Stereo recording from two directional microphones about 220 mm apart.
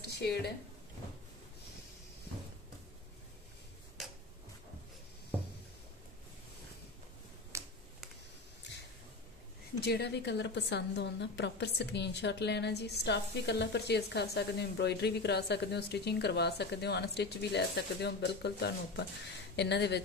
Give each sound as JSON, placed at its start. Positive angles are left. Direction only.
{"t": 0.0, "sound": "a sound", "side_deg": 45}
{"t": 7.5, "sound": "finger snapping", "side_deg": -15}
{"t": 9.8, "sound": "a woman's voice", "side_deg": 45}